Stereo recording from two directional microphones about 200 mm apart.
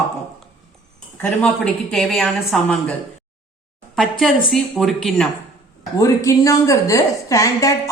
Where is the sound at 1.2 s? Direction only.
5° left (ahead or behind).